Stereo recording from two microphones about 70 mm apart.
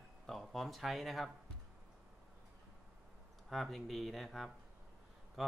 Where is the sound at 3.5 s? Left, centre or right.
Centre.